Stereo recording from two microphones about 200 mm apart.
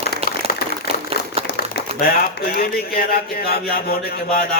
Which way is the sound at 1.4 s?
50° left (ahead or behind).